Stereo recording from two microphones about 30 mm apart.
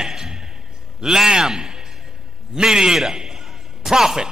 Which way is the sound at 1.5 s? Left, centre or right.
Right.